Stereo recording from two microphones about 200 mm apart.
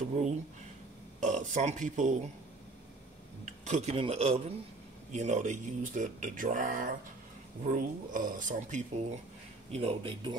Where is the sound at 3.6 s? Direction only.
35° right (ahead or behind).